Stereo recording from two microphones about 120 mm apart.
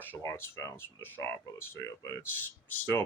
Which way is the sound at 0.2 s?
25° left (ahead or behind).